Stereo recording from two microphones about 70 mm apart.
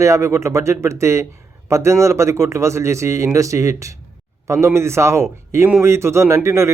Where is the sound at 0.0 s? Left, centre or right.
Right.